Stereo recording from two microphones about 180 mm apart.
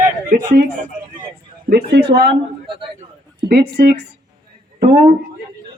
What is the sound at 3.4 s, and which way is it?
Speech, 60° right (ahead or behind).